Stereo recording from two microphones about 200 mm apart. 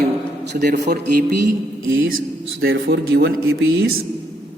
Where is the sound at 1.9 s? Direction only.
85° right.